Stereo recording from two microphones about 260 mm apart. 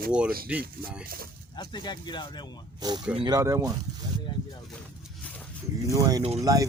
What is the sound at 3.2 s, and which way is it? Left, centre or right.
Speech, centre.